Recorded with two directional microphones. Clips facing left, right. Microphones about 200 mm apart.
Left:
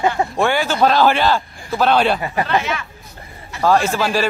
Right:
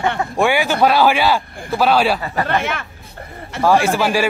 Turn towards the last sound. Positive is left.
turn(degrees=-10)  # may be behind; listen again after turning